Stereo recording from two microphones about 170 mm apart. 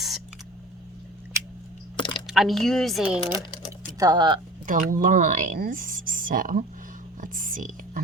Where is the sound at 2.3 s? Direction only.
Centre (ahead or behind).